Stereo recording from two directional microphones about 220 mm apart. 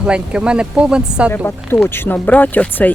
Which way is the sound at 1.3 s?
10° left (ahead or behind).